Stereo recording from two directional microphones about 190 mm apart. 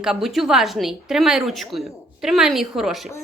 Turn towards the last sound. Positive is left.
turn(degrees=0)  # may be behind; listen again after turning